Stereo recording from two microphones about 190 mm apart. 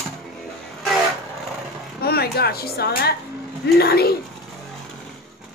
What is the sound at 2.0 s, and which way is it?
A woman's voice, 55° left (ahead or behind).